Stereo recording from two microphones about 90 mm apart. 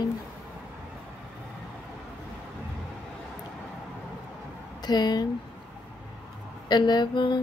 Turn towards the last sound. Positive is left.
turn(degrees=55)  # may be behind; listen again after turning